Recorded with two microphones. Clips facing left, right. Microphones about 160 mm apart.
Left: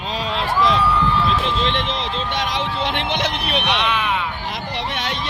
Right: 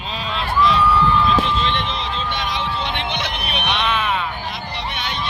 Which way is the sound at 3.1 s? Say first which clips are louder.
Left 4 dB; 90° left.